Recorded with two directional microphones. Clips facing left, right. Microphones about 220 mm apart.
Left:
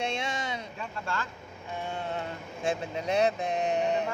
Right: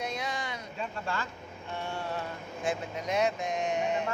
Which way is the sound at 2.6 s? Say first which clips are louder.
Left 3 dB; 30° left (ahead or behind).